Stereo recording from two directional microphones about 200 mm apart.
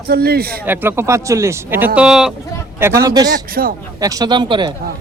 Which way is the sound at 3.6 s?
50° right (ahead or behind).